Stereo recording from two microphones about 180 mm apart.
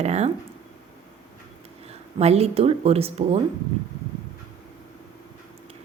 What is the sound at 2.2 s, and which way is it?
A woman's voice, 35° right (ahead or behind).